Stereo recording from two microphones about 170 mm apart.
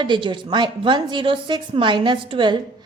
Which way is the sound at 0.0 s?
30° right (ahead or behind).